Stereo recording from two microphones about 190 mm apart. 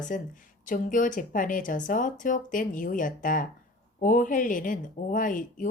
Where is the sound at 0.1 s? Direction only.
45° left (ahead or behind).